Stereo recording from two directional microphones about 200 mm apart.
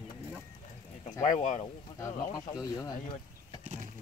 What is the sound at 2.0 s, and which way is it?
Speech, 15° left (ahead or behind).